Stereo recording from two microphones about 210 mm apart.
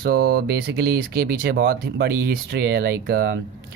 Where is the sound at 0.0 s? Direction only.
50° right (ahead or behind).